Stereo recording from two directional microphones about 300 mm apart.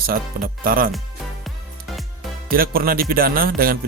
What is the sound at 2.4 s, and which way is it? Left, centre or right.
A man's voice, right.